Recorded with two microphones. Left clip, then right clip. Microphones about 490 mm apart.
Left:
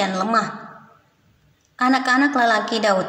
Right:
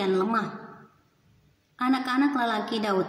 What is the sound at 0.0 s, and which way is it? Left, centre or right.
Speech, right.